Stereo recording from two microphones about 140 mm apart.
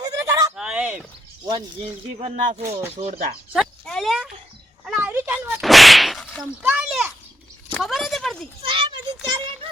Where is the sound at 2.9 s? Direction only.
50° right (ahead or behind).